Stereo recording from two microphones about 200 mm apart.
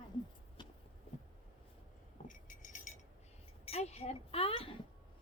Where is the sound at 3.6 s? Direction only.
30° left (ahead or behind).